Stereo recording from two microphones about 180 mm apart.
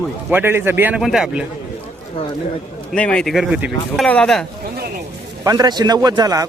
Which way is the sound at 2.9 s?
5° left (ahead or behind).